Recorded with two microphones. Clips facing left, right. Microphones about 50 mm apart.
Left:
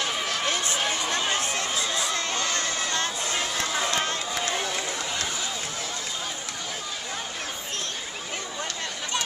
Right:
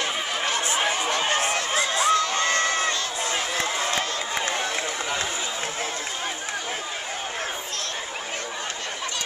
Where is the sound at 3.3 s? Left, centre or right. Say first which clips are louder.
Right 2 dB; right.